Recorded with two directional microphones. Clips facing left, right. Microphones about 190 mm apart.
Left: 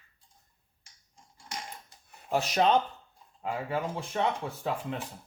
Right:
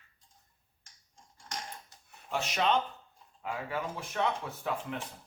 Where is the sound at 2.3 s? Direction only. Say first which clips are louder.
Left 5 dB; 40° left (ahead or behind).